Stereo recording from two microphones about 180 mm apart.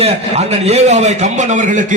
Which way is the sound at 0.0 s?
35° right (ahead or behind).